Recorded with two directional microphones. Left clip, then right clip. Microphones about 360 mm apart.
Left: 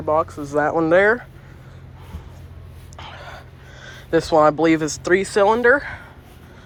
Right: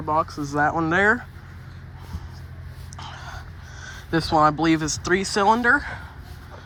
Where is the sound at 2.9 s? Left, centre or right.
Centre.